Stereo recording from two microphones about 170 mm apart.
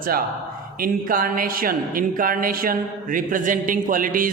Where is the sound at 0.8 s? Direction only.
55° right (ahead or behind).